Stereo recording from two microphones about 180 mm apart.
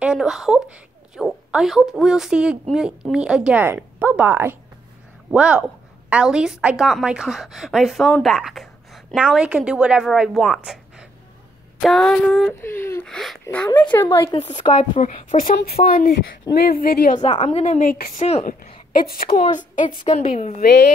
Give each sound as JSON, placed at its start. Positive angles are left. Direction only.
{"t": 0.0, "sound": "a woman's voice", "side_deg": -5}
{"t": 14.3, "sound": "a woman's voice", "side_deg": 40}
{"t": 17.3, "sound": "a woman's voice", "side_deg": 30}
{"t": 17.7, "sound": "a woman's voice", "side_deg": 55}
{"t": 18.2, "sound": "a woman's voice", "side_deg": 40}
{"t": 18.5, "sound": "a woman's voice", "side_deg": 55}
{"t": 19.2, "sound": "a woman's voice", "side_deg": 35}
{"t": 20.0, "sound": "a woman's voice", "side_deg": 30}
{"t": 20.2, "sound": "a woman's voice", "side_deg": 40}